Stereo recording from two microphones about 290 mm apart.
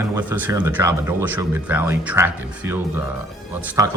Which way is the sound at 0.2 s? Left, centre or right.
Centre.